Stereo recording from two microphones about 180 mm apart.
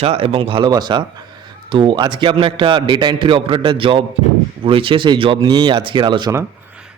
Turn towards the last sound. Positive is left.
turn(degrees=-20)  # may be behind; listen again after turning